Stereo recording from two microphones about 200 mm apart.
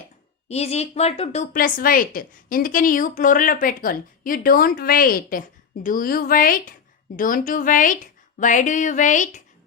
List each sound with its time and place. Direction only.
0.4 s speech: 30° left (ahead or behind)
1.5 s a woman's voice: 45° left (ahead or behind)